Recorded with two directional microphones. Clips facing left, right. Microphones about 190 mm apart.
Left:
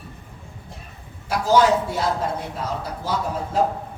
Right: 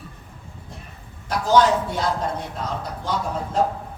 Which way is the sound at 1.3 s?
10° left (ahead or behind).